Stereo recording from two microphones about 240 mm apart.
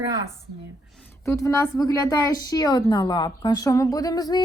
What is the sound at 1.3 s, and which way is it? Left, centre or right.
A woman's voice, centre.